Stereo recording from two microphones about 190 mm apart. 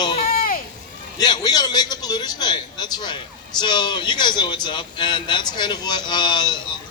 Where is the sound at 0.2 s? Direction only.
50° left (ahead or behind).